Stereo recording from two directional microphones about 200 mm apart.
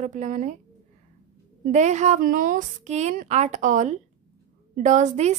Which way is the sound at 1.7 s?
35° right (ahead or behind).